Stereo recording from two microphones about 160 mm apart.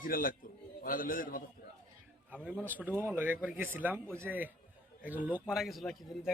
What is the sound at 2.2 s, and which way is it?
A man's voice, 10° right (ahead or behind).